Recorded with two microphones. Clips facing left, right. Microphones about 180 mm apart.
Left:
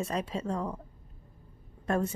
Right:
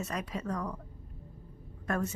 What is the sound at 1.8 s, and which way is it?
Speech, 30° left (ahead or behind).